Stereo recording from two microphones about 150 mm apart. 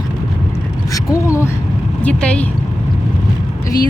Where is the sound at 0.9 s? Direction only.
20° left (ahead or behind).